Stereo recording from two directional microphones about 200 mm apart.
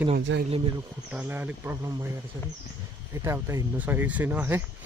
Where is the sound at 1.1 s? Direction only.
10° right (ahead or behind).